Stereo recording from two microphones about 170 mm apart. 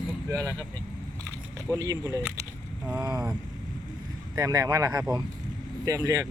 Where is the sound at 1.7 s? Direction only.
20° right (ahead or behind).